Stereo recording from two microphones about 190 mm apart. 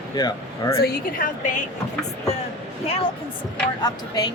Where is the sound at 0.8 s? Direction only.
45° left (ahead or behind).